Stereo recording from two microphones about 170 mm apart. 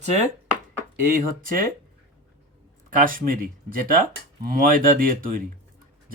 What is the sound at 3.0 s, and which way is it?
Speech, 55° right (ahead or behind).